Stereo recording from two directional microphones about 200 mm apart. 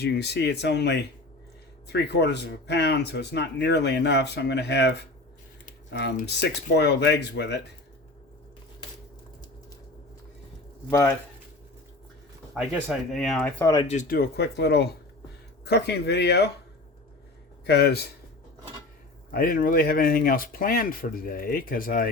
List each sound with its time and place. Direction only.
0.0 s speech: 55° left (ahead or behind)
5.9 s speech: 60° left (ahead or behind)
10.8 s speech: 15° left (ahead or behind)
12.5 s speech: 5° right (ahead or behind)
13.8 s speech: 40° left (ahead or behind)
17.7 s speech: 55° left (ahead or behind)
19.3 s speech: 45° left (ahead or behind)